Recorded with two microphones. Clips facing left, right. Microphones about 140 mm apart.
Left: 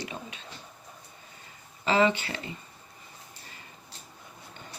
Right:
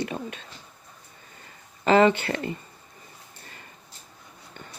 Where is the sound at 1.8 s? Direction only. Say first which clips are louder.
Right 6 dB; 50° right (ahead or behind).